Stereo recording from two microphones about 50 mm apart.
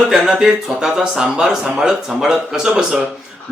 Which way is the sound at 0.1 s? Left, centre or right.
Centre.